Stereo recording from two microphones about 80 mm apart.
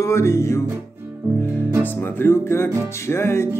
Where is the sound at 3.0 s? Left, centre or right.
Left.